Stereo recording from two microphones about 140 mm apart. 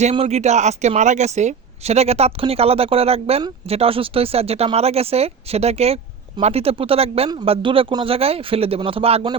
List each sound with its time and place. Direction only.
0.0 s speech: 50° right (ahead or behind)